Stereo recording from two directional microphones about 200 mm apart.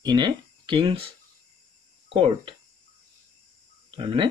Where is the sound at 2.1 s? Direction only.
25° right (ahead or behind).